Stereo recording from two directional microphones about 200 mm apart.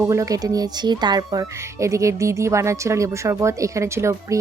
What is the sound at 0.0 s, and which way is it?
Speech, 15° right (ahead or behind).